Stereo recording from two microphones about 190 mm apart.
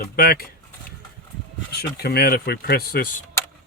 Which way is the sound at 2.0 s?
55° left (ahead or behind).